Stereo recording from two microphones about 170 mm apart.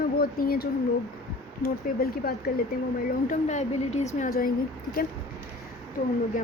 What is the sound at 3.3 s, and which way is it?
Speech, 45° left (ahead or behind).